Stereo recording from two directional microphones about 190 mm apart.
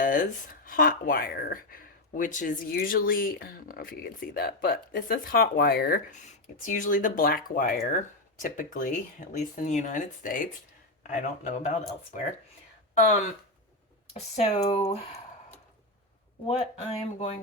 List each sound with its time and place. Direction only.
0.0 s speech: 45° left (ahead or behind)
6.8 s speech: 45° left (ahead or behind)
14.1 s speech: 35° left (ahead or behind)